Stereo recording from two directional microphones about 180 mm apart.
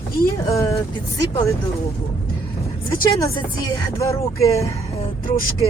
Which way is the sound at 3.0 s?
15° left (ahead or behind).